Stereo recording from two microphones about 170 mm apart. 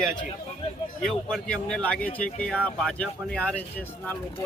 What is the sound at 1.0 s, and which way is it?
Speech, 5° left (ahead or behind).